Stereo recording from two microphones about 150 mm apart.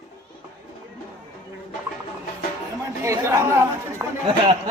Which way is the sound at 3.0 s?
20° right (ahead or behind).